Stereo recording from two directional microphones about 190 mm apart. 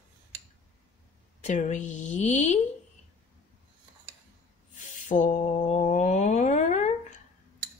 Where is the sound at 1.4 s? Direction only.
40° left (ahead or behind).